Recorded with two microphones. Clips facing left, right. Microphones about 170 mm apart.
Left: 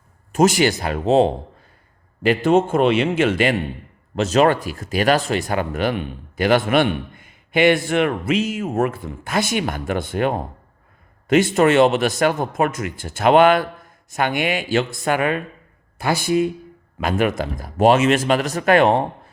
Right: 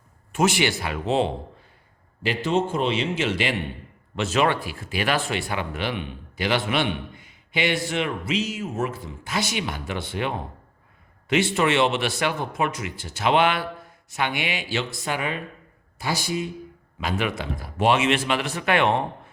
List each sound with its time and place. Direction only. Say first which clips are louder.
0.3 s speech: left 6 dB; 40° left (ahead or behind)
2.2 s speech: left 7 dB; 50° left (ahead or behind)
4.1 s speech: left 6 dB; 40° left (ahead or behind)